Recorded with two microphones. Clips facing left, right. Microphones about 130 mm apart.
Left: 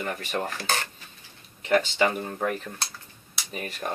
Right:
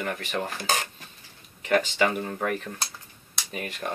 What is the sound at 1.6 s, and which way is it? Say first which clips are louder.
Speech: left 1 dB; 30° left (ahead or behind).